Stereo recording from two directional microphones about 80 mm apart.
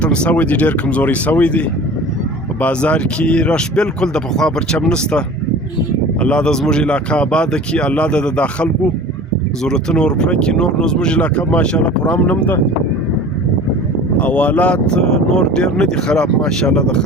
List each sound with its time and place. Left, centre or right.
0.0 s speech: centre
14.2 s speech: centre